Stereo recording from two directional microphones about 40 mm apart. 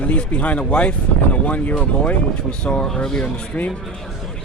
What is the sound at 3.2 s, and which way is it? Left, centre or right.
Speech, left.